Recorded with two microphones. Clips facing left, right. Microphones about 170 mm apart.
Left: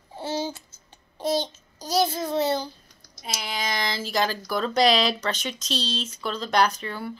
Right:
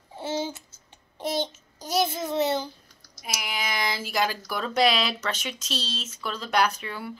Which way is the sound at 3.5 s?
10° right (ahead or behind).